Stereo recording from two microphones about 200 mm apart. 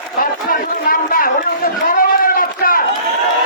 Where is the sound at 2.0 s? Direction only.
45° left (ahead or behind).